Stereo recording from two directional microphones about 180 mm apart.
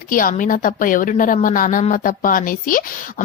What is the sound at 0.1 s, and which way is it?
A woman's voice, 50° left (ahead or behind).